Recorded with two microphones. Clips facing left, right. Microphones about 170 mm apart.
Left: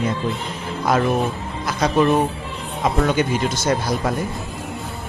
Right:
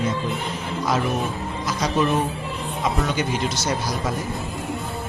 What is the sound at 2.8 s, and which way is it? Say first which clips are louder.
Speech: left 5 dB; 55° left (ahead or behind).